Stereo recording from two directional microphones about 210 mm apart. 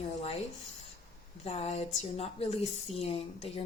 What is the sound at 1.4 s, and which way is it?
A woman's voice, 30° left (ahead or behind).